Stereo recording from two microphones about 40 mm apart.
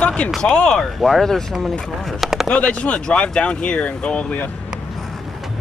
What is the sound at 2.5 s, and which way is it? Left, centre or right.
Speech, left.